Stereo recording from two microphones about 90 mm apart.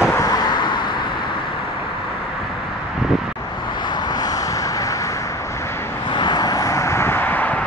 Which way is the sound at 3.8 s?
55° left (ahead or behind).